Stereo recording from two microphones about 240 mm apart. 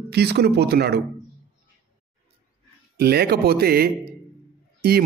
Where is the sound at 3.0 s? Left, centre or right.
Right.